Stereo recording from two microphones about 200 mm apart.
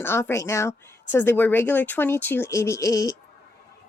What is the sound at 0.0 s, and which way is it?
A woman's voice, 10° left (ahead or behind).